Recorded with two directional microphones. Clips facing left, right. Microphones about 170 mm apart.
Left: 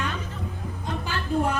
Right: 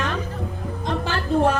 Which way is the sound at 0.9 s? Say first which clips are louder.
Right 5 dB; 75° right (ahead or behind).